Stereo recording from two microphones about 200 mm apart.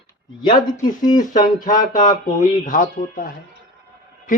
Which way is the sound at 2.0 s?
40° left (ahead or behind).